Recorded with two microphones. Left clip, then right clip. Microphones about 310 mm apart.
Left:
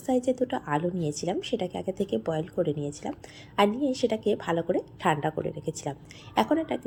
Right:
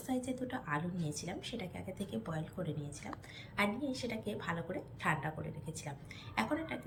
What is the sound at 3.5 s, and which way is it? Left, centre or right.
A woman's voice, centre.